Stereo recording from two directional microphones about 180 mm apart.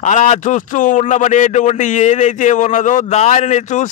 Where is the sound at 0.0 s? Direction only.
40° left (ahead or behind).